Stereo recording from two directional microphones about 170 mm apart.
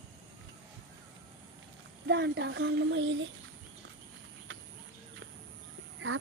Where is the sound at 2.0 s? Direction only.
85° right.